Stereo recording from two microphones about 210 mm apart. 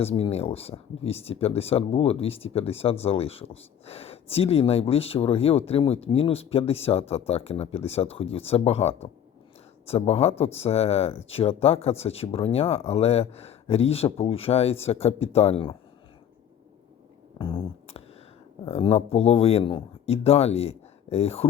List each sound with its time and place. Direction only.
0.0 s speech: 30° left (ahead or behind)
17.3 s beatboxing: 25° left (ahead or behind)
18.6 s speech: 25° left (ahead or behind)